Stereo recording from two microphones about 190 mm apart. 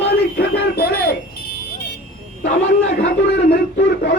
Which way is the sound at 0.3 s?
55° left (ahead or behind).